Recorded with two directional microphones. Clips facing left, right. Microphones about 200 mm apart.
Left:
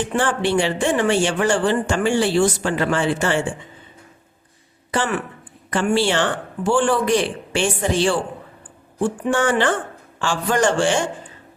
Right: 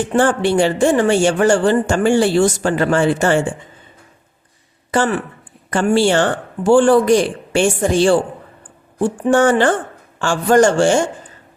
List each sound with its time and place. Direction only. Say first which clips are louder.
0.0 s speech: right 5 dB; 45° right (ahead or behind)
4.9 s speech: right 5 dB; 40° right (ahead or behind)
9.2 s speech: right 7 dB; 45° right (ahead or behind)